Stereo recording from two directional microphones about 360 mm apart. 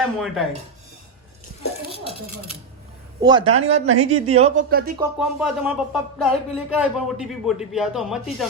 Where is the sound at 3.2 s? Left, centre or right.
Centre.